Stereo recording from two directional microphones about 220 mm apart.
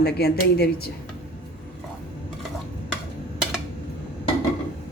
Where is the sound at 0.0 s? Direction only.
45° left (ahead or behind).